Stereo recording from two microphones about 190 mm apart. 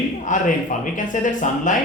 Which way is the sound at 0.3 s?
40° left (ahead or behind).